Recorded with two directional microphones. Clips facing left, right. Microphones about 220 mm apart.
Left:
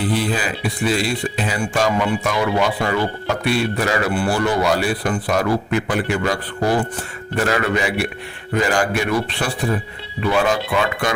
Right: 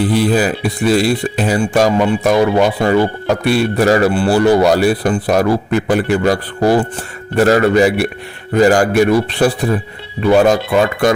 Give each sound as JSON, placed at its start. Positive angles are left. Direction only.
{"t": 0.2, "sound": "speech", "side_deg": -40}